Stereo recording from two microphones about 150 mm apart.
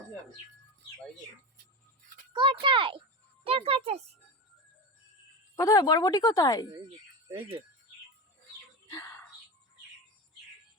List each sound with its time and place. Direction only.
2.3 s speech: 35° right (ahead or behind)
5.5 s speech: 20° left (ahead or behind)
7.3 s speech: 35° right (ahead or behind)
8.9 s a sound: 15° left (ahead or behind)